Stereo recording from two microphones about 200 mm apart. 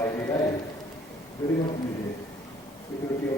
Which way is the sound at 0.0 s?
10° left (ahead or behind).